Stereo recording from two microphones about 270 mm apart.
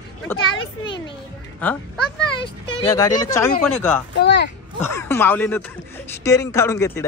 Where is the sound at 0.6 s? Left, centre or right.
Centre.